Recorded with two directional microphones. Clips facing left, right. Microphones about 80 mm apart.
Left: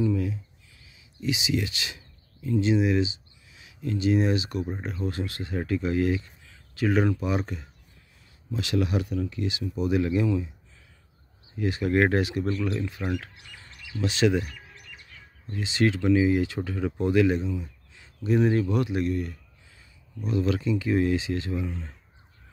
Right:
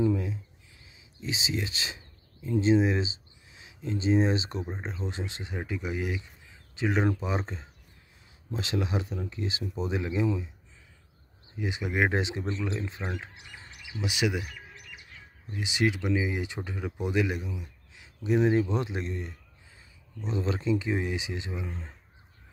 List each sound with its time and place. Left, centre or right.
0.0 s speech: right
0.8 s a sound: right
2.5 s speech: right
11.5 s speech: centre